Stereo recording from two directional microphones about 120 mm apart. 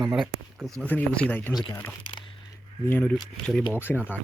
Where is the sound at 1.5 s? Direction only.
35° left (ahead or behind).